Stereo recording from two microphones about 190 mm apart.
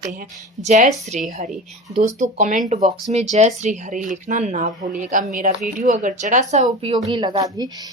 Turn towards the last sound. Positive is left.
turn(degrees=-20)  # may be behind; listen again after turning